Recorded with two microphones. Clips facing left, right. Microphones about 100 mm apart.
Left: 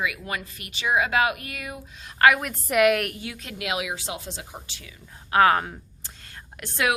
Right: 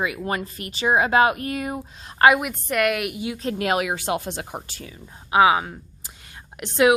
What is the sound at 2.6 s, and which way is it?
Speech, centre (ahead or behind).